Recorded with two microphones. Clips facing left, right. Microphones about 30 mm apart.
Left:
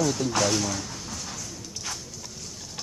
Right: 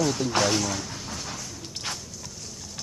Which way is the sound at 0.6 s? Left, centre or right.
Centre.